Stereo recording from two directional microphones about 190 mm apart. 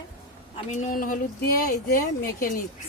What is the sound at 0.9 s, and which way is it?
Speech, 45° left (ahead or behind).